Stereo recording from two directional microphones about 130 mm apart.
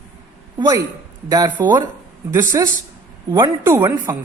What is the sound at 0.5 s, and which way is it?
Speech, 25° right (ahead or behind).